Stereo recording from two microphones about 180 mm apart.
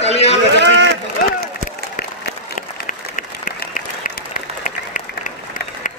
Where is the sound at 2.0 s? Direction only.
55° left (ahead or behind).